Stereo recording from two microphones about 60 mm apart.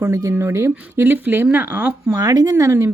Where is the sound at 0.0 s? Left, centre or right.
Right.